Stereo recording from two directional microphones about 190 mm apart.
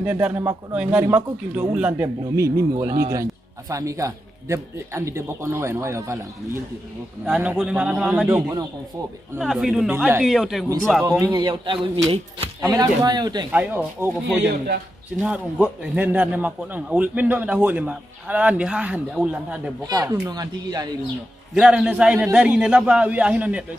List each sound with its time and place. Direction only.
0.0 s a man's voice: 10° right (ahead or behind)
9.4 s a man's voice: centre (ahead or behind)
11.1 s speech: 20° right (ahead or behind)
13.5 s a man's voice: 10° right (ahead or behind)
20.0 s speech: 20° right (ahead or behind)
21.5 s a man's voice: 5° right (ahead or behind)